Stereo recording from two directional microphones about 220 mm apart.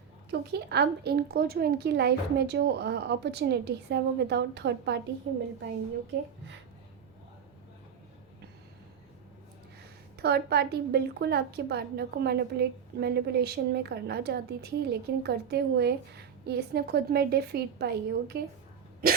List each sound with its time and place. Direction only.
0.3 s a woman's voice: 50° right (ahead or behind)
10.2 s a woman's voice: 45° right (ahead or behind)
19.0 s hiccup: 40° right (ahead or behind)